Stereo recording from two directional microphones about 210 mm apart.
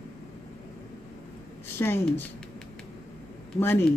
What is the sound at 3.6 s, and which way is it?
Speech, 10° left (ahead or behind).